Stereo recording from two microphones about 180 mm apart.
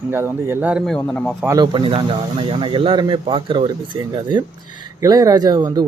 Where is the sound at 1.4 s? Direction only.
20° right (ahead or behind).